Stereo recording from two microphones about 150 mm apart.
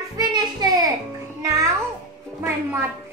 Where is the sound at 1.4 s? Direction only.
20° right (ahead or behind).